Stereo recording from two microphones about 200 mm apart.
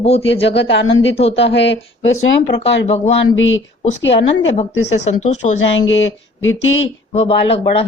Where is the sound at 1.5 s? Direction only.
65° left (ahead or behind).